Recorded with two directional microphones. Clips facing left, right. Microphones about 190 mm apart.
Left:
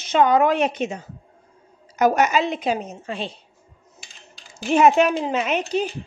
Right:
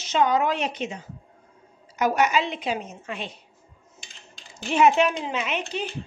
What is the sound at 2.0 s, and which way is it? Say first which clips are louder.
Speech: left 4 dB; 45° left (ahead or behind).